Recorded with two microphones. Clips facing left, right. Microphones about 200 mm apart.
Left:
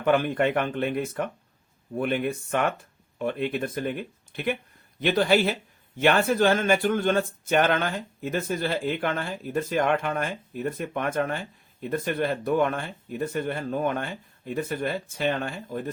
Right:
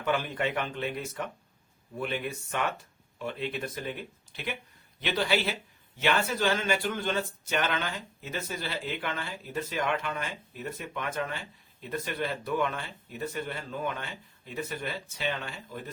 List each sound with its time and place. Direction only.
0.0 s speech: 55° left (ahead or behind)